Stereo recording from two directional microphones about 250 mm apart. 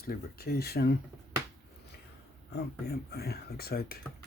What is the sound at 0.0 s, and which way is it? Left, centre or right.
Speech, left.